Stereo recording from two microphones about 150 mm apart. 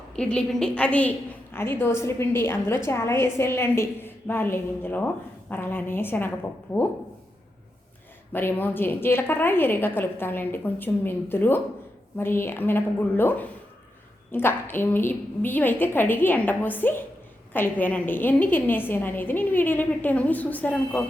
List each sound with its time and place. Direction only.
0.2 s a woman's voice: 5° left (ahead or behind)
8.3 s a woman's voice: 15° left (ahead or behind)